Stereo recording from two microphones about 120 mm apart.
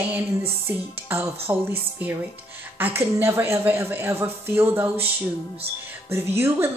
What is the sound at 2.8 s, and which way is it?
A woman's voice, 20° right (ahead or behind).